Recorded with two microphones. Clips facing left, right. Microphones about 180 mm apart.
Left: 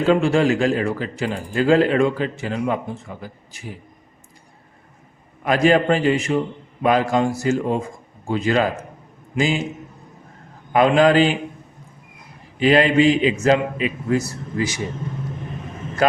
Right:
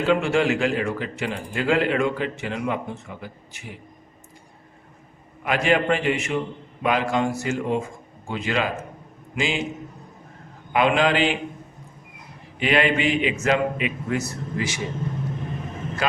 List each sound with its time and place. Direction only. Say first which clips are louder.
0.0 s a man's voice: left 4 dB; 35° left (ahead or behind)
5.5 s a man's voice: left 5 dB; 40° left (ahead or behind)
10.7 s a man's voice: left 5 dB; 40° left (ahead or behind)
12.5 s a man's voice: left 6 dB; 35° left (ahead or behind)